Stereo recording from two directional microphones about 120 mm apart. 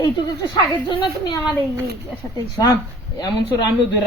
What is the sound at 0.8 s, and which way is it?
Speech, 40° left (ahead or behind).